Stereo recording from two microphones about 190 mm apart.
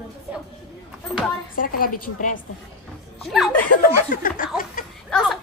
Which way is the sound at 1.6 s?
50° left (ahead or behind).